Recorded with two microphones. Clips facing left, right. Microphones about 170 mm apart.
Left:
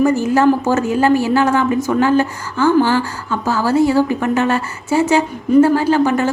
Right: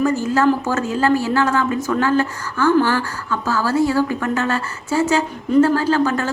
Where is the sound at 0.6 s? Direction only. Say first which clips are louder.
Left 4 dB; 20° left (ahead or behind).